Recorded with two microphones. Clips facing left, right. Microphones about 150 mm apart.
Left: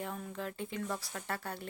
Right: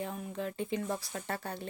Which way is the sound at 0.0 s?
20° right (ahead or behind).